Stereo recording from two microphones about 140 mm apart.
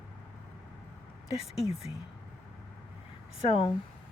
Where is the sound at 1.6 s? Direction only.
45° left (ahead or behind).